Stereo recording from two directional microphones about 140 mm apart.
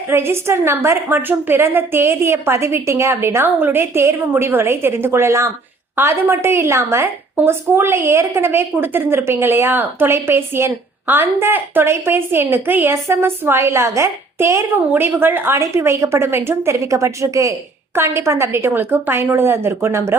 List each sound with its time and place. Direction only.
0.1 s a woman's voice: 15° right (ahead or behind)